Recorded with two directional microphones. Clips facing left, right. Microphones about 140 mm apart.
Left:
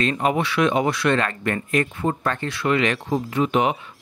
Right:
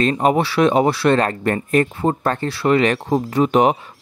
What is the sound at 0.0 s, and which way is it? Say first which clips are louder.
Speech: right 5 dB; 35° right (ahead or behind).